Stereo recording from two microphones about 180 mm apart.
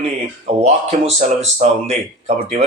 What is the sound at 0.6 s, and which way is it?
Speech, 40° right (ahead or behind).